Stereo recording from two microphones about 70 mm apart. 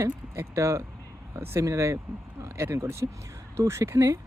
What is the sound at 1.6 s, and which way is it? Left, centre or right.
Speech, right.